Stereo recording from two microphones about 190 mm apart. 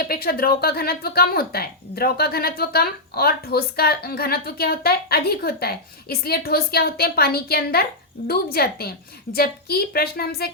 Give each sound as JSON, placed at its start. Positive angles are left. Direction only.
{"t": 0.0, "sound": "speech", "side_deg": 55}